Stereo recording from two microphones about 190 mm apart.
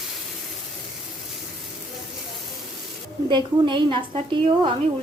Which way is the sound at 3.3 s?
25° right (ahead or behind).